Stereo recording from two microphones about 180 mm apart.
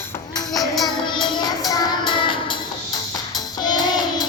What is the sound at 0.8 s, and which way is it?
Music, 25° left (ahead or behind).